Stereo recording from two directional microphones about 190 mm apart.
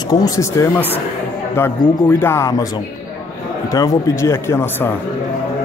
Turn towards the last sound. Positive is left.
turn(degrees=15)  # may be behind; listen again after turning